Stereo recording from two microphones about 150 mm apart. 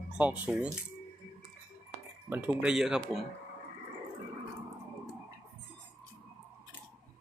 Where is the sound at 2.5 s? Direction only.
Centre (ahead or behind).